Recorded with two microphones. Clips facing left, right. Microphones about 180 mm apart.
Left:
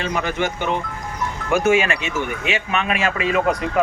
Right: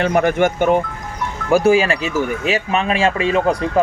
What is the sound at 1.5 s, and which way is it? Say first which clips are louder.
Speech: right 4 dB; 35° right (ahead or behind).